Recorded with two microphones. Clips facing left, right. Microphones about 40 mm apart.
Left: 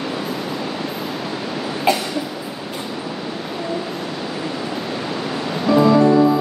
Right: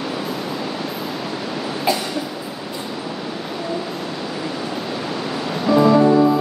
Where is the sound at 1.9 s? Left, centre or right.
Left.